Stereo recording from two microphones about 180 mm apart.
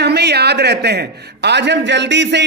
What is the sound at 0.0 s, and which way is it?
A man's voice, 65° right (ahead or behind).